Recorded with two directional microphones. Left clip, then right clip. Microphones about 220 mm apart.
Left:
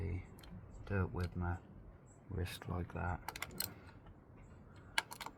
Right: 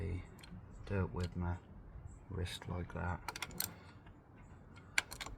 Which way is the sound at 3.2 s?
Centre (ahead or behind).